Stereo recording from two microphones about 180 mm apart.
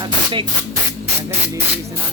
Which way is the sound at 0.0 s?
25° right (ahead or behind).